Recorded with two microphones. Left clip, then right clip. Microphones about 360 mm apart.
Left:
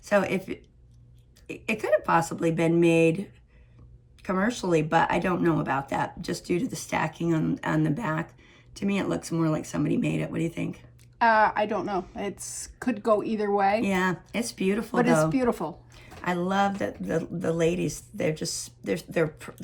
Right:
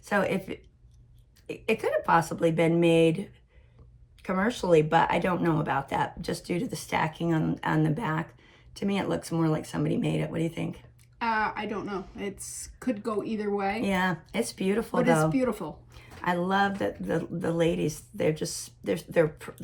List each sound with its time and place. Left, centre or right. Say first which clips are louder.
0.0 s speech: left 3 dB; centre
11.2 s speech: left 7 dB; left
13.8 s speech: left 1 dB; centre
15.3 s speech: left 2 dB; left
15.9 s speech: right 5 dB; centre